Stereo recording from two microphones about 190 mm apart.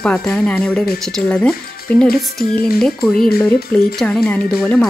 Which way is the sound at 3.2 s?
55° left (ahead or behind).